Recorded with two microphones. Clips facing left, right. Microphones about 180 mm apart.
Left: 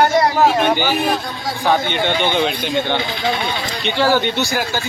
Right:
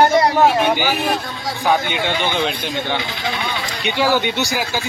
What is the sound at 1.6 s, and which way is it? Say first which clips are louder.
Speech: left 1 dB; 5° right (ahead or behind).